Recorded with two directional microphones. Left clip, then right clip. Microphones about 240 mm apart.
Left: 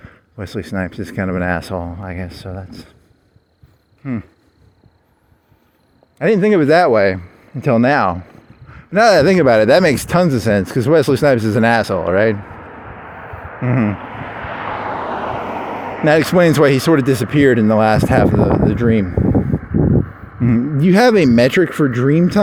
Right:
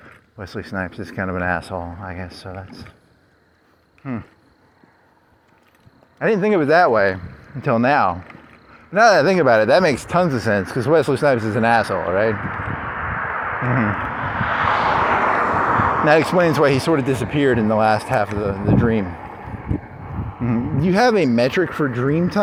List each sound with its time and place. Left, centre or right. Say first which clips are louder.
0.3 s speech: left 3 dB; left
4.0 s speech: left 4 dB; left
6.1 s speech: left 4 dB; left
12.8 s a sound: right 9 dB; left; by 16.0 s centre
16.0 s speech: left 6 dB; left
20.4 s a sound: left 5 dB; left
21.3 s speech: left 5 dB; left